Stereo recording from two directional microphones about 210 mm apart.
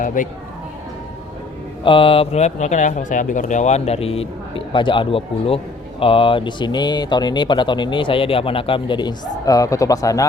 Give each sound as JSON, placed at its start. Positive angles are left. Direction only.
{"t": 0.0, "sound": "speech", "side_deg": 40}
{"t": 1.8, "sound": "a man's voice", "side_deg": 25}